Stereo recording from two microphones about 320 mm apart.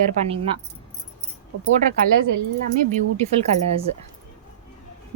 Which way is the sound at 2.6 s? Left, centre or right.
Right.